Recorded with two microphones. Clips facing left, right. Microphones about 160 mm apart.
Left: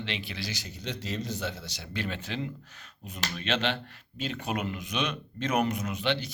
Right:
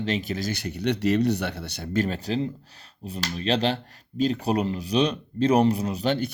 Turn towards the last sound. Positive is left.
turn(degrees=-35)  # may be behind; listen again after turning